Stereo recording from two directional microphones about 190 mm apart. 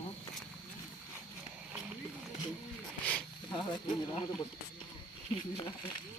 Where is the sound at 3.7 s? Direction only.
25° left (ahead or behind).